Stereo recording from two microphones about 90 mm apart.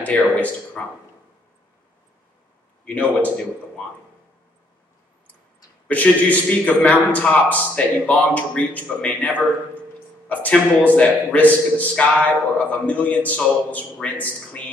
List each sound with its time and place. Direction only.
0.0 s a man's voice: 15° left (ahead or behind)
2.8 s a man's voice: 15° left (ahead or behind)
5.9 s a man's voice: 15° left (ahead or behind)